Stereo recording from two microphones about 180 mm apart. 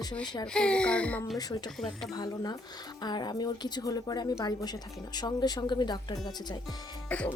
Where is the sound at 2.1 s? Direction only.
20° left (ahead or behind).